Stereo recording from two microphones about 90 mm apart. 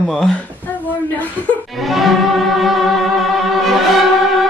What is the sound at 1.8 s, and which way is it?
Speech, centre (ahead or behind).